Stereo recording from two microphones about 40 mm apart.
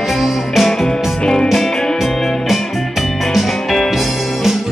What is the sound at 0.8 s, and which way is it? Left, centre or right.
Music, centre.